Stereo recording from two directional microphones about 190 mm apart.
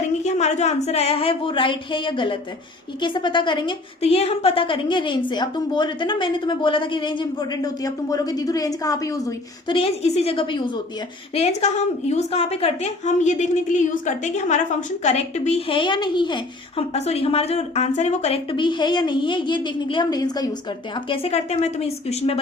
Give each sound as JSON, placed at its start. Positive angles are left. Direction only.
{"t": 0.3, "sound": "a woman's voice", "side_deg": 35}
{"t": 21.1, "sound": "a woman's voice", "side_deg": 35}